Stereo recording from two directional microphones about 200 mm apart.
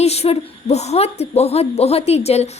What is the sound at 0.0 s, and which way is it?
A woman's voice, 30° left (ahead or behind).